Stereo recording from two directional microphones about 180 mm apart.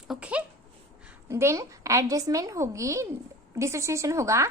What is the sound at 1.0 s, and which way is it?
A woman's voice, 15° right (ahead or behind).